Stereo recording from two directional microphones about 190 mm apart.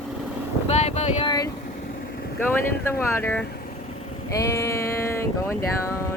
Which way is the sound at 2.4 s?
10° left (ahead or behind).